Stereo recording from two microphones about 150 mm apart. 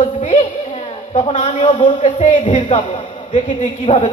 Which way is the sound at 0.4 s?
40° left (ahead or behind).